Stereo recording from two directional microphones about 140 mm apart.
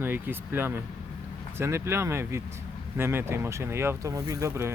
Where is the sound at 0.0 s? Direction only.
15° right (ahead or behind).